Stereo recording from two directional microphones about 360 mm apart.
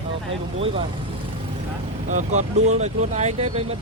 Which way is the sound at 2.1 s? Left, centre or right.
Centre.